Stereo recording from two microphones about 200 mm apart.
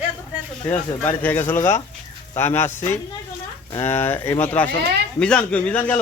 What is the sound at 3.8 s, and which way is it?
Speech, 10° left (ahead or behind).